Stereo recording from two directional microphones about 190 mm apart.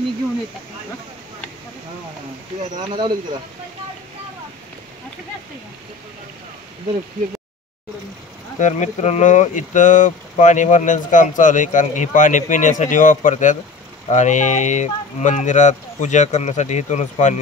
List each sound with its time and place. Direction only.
8.5 s speech: 40° left (ahead or behind)